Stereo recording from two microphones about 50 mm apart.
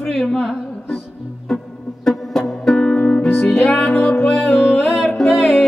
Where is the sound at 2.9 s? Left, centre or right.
Centre.